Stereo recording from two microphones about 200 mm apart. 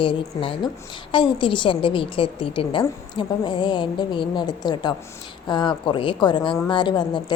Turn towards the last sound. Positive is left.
turn(degrees=25)  # may be behind; listen again after turning